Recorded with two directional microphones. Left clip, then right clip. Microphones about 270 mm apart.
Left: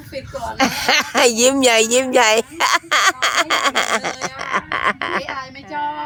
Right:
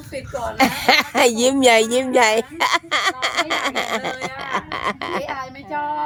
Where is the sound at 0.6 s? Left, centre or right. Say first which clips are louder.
Right 1 dB; centre.